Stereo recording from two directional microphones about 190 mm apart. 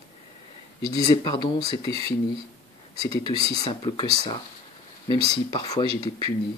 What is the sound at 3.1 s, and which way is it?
Speech, 20° left (ahead or behind).